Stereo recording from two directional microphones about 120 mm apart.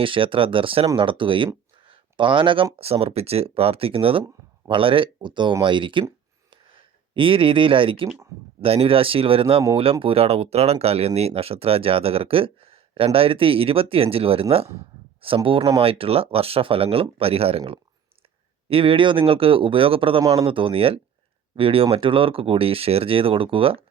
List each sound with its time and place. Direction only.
0.0 s speech: 45° right (ahead or behind)
1.9 s a sound: 45° right (ahead or behind)
2.7 s speech: 55° right (ahead or behind)
6.5 s a sound: 45° right (ahead or behind)
8.6 s speech: 50° right (ahead or behind)
15.4 s speech: 45° right (ahead or behind)
18.7 s speech: 50° right (ahead or behind)
20.2 s speech: 30° right (ahead or behind)
20.5 s speech: 45° right (ahead or behind)